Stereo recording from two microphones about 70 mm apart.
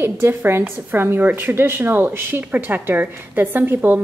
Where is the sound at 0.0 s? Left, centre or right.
Right.